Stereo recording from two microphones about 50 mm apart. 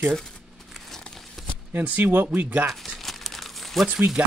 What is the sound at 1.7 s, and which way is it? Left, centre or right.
Speech, right.